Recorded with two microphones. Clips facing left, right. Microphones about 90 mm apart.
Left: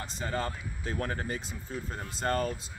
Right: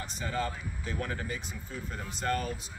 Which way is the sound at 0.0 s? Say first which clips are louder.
Even; 40° left (ahead or behind).